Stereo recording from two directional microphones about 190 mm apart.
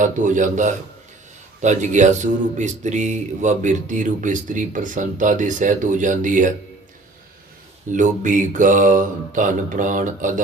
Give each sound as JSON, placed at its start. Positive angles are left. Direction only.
{"t": 0.0, "sound": "speech", "side_deg": -40}
{"t": 7.9, "sound": "mantra", "side_deg": -40}